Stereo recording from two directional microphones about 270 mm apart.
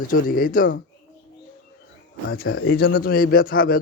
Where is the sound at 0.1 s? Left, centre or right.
Left.